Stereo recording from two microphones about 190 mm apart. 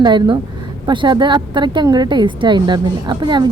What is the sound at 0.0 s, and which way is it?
A man's voice, 25° right (ahead or behind).